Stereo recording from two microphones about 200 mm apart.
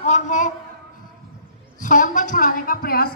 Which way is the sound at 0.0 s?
35° left (ahead or behind).